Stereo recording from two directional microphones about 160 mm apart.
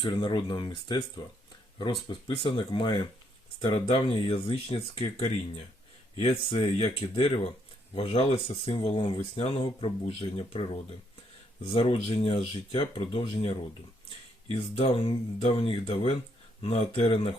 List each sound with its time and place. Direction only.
0.0 s speech: 30° left (ahead or behind)